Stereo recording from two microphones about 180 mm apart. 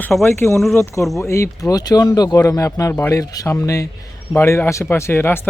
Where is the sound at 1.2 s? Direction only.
15° left (ahead or behind).